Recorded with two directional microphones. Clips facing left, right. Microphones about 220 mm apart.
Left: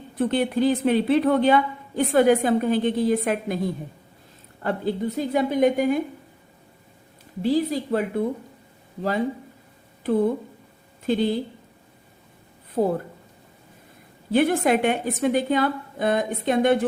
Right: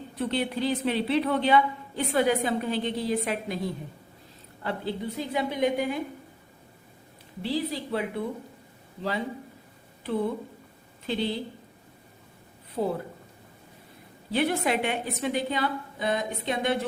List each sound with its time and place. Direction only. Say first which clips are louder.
0.2 s a woman's voice: left 7 dB; 50° left (ahead or behind)
7.4 s a woman's voice: left 7 dB; 45° left (ahead or behind)
12.7 s a woman's voice: left 6 dB; 50° left (ahead or behind)
14.3 s a woman's voice: left 6 dB; 50° left (ahead or behind)